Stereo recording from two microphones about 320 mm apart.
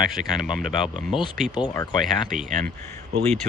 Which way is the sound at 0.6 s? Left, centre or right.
Right.